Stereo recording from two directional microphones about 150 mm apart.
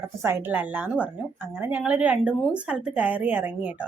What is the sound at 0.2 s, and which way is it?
Speech, 15° right (ahead or behind).